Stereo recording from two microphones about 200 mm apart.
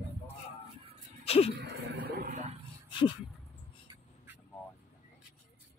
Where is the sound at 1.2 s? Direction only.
30° left (ahead or behind).